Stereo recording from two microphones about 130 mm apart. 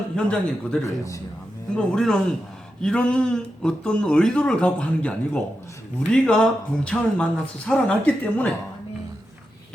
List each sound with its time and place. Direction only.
0.2 s speech: 10° left (ahead or behind)
0.9 s a man's voice: 25° left (ahead or behind)
1.7 s speech: 5° left (ahead or behind)